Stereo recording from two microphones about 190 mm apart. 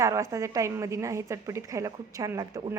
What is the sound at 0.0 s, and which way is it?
A woman's voice, 15° right (ahead or behind).